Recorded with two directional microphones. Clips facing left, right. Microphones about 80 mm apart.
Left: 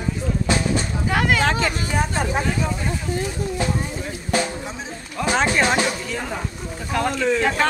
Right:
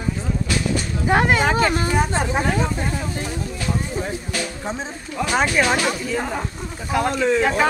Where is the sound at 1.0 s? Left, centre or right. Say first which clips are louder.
Right 4 dB; right.